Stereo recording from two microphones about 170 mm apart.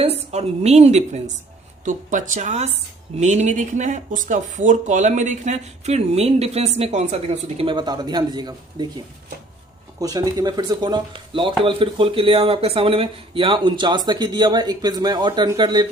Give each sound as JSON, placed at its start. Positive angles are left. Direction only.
{"t": 0.0, "sound": "a woman's voice", "side_deg": -40}
{"t": 10.0, "sound": "speech", "side_deg": -20}